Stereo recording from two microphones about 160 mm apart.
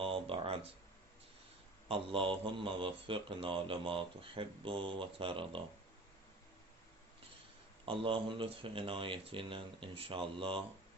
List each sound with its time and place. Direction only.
0.0 s a sound: 35° right (ahead or behind)
1.9 s speech: 35° right (ahead or behind)
7.9 s speech: 35° right (ahead or behind)